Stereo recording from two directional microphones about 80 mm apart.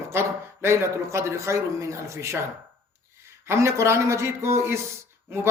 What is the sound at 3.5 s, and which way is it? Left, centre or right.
A man's voice, right.